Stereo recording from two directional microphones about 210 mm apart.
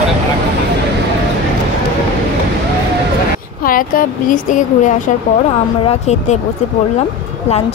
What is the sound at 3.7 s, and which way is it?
Speech, 40° left (ahead or behind).